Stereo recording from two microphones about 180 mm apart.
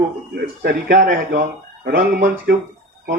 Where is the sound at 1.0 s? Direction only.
50° right (ahead or behind).